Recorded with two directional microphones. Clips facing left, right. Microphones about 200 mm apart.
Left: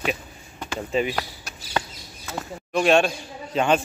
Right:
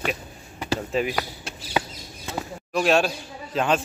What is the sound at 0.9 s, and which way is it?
Speech, centre (ahead or behind).